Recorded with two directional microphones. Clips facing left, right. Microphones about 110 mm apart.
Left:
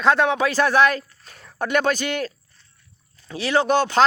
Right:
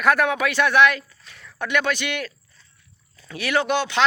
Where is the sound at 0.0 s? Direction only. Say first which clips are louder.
Left 1 dB; 25° left (ahead or behind).